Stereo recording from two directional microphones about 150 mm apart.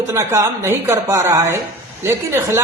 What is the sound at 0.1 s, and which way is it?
A man's voice, 20° right (ahead or behind).